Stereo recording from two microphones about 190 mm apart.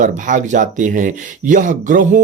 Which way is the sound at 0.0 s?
40° right (ahead or behind).